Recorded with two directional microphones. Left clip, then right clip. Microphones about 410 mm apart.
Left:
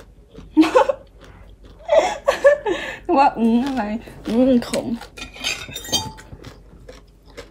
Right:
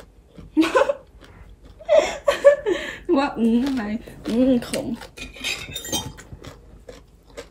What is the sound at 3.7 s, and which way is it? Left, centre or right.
Speech, centre.